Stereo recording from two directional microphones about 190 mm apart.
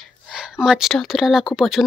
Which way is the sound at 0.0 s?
Centre (ahead or behind).